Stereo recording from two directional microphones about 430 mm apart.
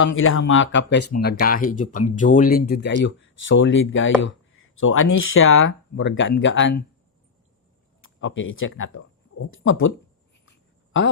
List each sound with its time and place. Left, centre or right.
0.1 s speech: left
8.0 s speech: left
10.4 s a sound: left